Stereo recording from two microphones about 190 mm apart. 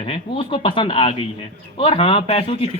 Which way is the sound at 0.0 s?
25° left (ahead or behind).